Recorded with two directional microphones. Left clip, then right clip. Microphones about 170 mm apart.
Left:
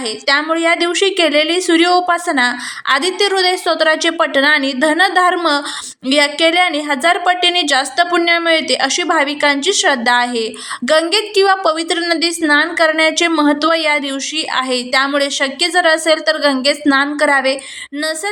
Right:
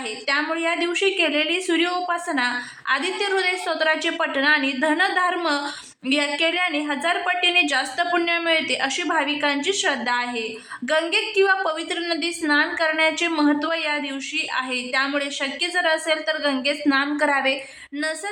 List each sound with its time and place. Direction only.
0.3 s a woman's voice: 30° left (ahead or behind)